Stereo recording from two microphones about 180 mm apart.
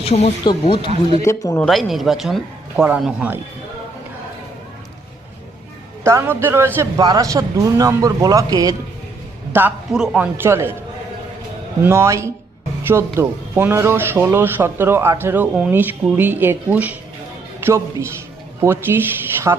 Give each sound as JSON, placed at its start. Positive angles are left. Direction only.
{"t": 0.0, "sound": "speech", "side_deg": 35}
{"t": 1.2, "sound": "a man's voice", "side_deg": 15}
{"t": 1.6, "sound": "speech", "side_deg": 0}
{"t": 6.1, "sound": "a man's voice", "side_deg": -15}
{"t": 9.5, "sound": "a man's voice", "side_deg": -10}
{"t": 11.8, "sound": "a man's voice", "side_deg": -15}